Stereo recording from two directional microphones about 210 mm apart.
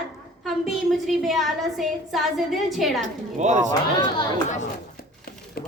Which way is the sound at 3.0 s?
35° right (ahead or behind).